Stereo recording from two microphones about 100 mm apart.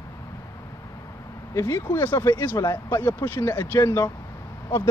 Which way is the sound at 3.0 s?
20° left (ahead or behind).